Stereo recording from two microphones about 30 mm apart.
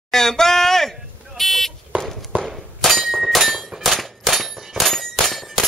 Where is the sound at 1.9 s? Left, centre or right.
Right.